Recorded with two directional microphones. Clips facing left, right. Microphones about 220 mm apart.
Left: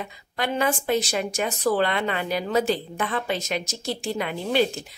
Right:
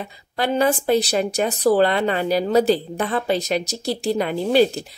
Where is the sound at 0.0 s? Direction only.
35° right (ahead or behind).